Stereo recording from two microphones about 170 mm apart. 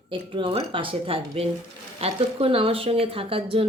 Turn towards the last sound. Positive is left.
turn(degrees=-35)  # may be behind; listen again after turning